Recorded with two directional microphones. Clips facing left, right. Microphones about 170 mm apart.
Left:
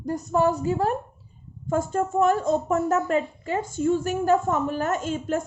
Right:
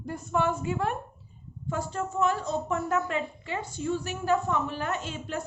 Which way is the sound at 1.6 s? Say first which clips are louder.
Left 7 dB; 45° left (ahead or behind).